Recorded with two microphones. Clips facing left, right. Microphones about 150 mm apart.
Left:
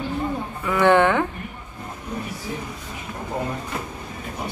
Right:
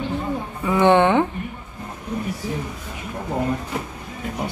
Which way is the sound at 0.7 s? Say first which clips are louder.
Right 1 dB; 20° right (ahead or behind).